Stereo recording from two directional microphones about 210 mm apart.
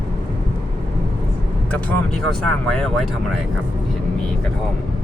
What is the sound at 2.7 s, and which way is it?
Speech, 5° left (ahead or behind).